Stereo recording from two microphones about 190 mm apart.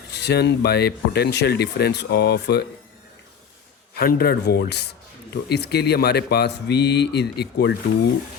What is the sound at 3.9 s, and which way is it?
Speech, 55° left (ahead or behind).